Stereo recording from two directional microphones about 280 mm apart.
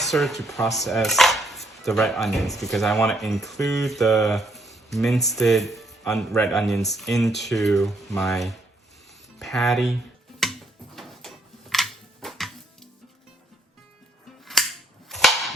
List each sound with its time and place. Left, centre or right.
0.0 s speech: centre
10.4 s a sound: centre
14.4 s cap gun: centre